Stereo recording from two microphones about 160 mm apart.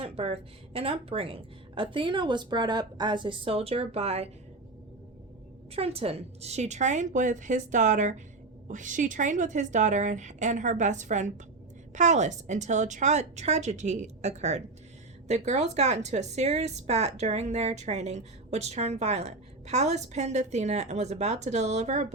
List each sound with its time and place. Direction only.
0.0 s a woman's voice: 40° right (ahead or behind)
5.7 s speech: 40° right (ahead or behind)